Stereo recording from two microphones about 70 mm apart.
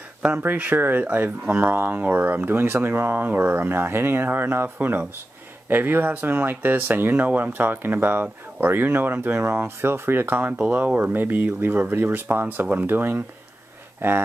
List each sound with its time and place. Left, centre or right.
0.4 s speech: right